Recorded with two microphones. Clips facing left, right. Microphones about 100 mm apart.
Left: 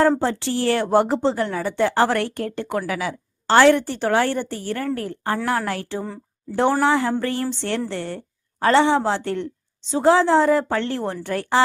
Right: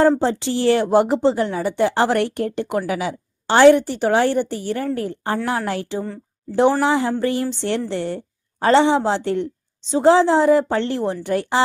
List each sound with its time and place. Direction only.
0.2 s a woman's voice: 20° right (ahead or behind)